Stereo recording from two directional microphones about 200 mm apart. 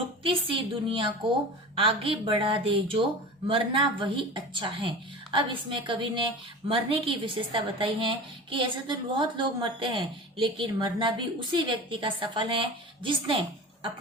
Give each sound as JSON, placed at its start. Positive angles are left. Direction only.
{"t": 0.2, "sound": "a woman's voice", "side_deg": -25}